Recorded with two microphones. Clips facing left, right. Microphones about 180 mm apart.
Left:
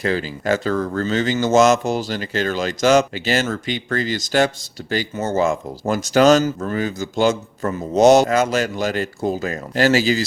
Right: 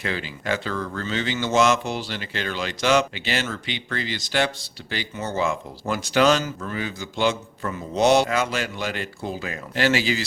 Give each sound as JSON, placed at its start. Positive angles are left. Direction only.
{"t": 0.0, "sound": "speech", "side_deg": 40}